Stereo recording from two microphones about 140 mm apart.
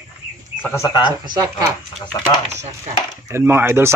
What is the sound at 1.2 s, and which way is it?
Speech, 30° right (ahead or behind).